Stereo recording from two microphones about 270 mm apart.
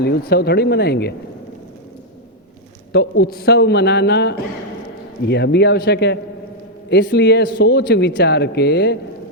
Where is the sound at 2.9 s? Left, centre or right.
Left.